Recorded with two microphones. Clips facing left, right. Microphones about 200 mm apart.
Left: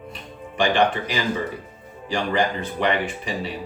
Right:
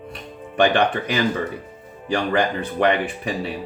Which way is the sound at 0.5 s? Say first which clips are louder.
Right 2 dB; 60° right (ahead or behind).